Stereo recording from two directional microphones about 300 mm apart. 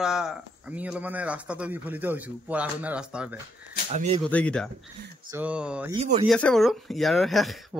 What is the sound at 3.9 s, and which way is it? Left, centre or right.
Speech, right.